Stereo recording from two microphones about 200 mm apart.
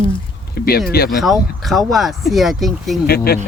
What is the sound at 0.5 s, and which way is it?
Speech, 50° left (ahead or behind).